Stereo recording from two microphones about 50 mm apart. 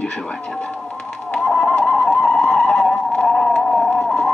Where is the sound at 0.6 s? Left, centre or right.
Centre.